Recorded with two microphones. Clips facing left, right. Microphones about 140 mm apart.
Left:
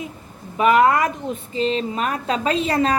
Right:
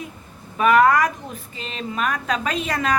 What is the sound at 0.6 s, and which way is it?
A woman's voice, 20° left (ahead or behind).